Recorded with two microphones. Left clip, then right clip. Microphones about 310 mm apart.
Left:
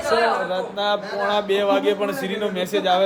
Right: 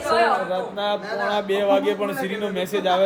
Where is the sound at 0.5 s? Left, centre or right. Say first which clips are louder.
Left 2 dB; centre.